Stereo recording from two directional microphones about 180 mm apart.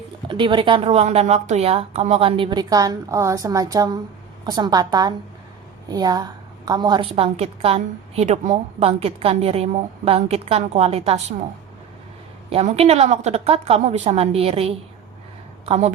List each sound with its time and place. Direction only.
0.3 s a woman's voice: 25° right (ahead or behind)
12.5 s a woman's voice: 35° right (ahead or behind)